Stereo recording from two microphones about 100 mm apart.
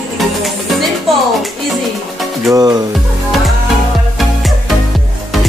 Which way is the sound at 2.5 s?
40° right (ahead or behind).